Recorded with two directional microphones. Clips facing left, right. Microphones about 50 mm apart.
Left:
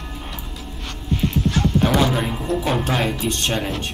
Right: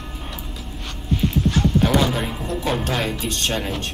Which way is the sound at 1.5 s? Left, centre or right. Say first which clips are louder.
Even; centre.